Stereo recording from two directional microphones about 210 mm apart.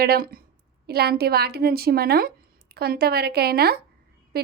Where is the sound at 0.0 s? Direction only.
45° right (ahead or behind).